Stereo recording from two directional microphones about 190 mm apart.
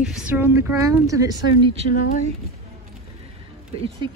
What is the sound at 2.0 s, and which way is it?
Speech, 45° left (ahead or behind).